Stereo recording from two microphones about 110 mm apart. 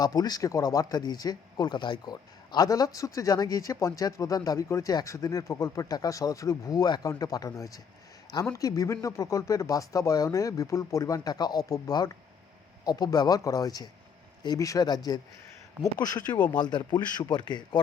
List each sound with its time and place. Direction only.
0.0 s speech: 35° left (ahead or behind)